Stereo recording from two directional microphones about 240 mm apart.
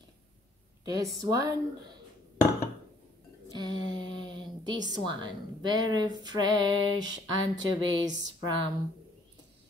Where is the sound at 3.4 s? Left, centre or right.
Centre.